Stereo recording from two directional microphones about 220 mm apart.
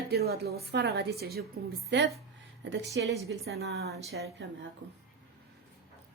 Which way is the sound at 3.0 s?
55° right (ahead or behind).